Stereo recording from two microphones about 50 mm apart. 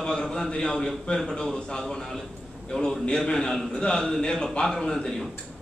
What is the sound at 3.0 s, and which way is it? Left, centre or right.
A man's voice, centre.